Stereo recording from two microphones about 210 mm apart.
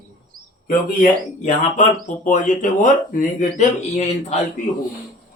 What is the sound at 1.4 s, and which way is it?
Speech, 35° left (ahead or behind).